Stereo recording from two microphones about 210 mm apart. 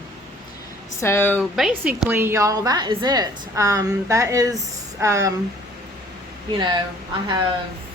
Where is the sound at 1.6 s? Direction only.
5° right (ahead or behind).